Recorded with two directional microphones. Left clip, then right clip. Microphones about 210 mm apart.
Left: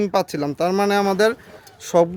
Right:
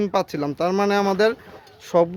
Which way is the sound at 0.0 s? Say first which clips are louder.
Left 2 dB; 10° left (ahead or behind).